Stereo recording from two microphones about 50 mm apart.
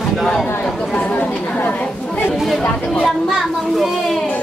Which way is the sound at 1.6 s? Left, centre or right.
Left.